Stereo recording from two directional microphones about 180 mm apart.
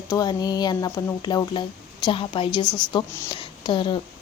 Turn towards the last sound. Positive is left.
turn(degrees=25)  # may be behind; listen again after turning